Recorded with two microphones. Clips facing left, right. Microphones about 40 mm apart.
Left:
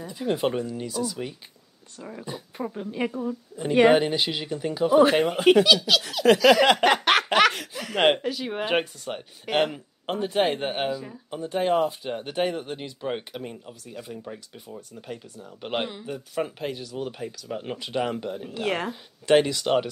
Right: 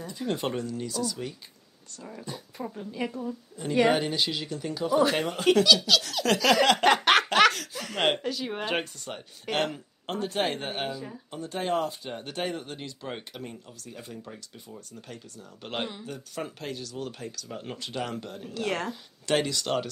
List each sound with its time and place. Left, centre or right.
0.0 s speech: centre
3.7 s speech: left
4.0 s speech: centre
6.8 s a sound: centre
7.5 s speech: left